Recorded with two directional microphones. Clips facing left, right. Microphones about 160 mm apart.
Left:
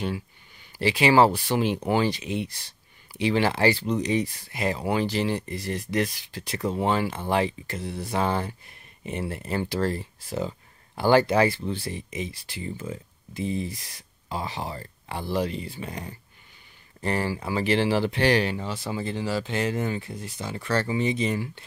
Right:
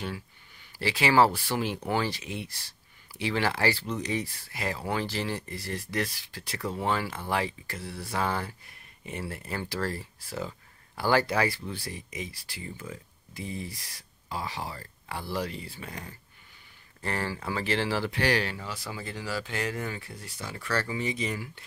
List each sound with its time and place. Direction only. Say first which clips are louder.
0.7 s speech: left 4 dB; 20° left (ahead or behind)